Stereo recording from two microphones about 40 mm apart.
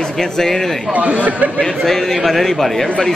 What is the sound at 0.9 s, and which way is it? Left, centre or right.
Speech, right.